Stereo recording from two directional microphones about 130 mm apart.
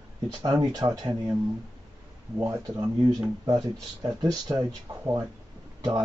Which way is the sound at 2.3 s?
15° right (ahead or behind).